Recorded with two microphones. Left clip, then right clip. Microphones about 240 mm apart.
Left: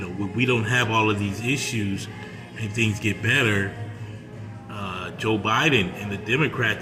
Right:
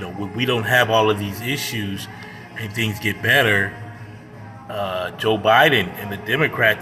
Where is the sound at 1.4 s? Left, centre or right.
Left.